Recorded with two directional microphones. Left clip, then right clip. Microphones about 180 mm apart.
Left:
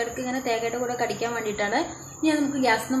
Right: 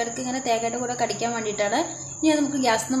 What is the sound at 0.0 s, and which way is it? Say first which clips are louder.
A woman's voice: right 1 dB; 40° right (ahead or behind).